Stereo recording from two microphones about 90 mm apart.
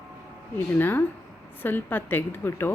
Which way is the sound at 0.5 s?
25° left (ahead or behind).